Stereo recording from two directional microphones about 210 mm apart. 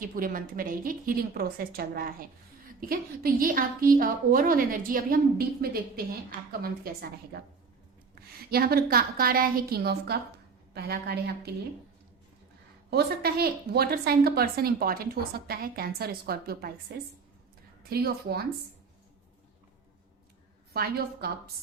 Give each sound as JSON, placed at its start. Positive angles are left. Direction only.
{"t": 0.0, "sound": "a woman's voice", "side_deg": -40}
{"t": 12.9, "sound": "a woman's voice", "side_deg": -50}
{"t": 17.8, "sound": "a woman's voice", "side_deg": -50}
{"t": 20.7, "sound": "a woman's voice", "side_deg": -45}